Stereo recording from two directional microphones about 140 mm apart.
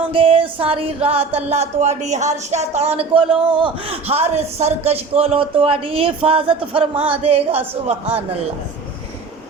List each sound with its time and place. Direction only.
0.1 s music: 40° right (ahead or behind)